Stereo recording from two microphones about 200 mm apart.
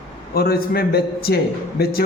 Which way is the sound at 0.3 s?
50° left (ahead or behind).